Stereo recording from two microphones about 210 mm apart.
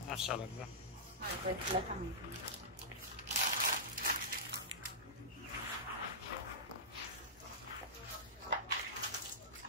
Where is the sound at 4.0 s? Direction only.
45° right (ahead or behind).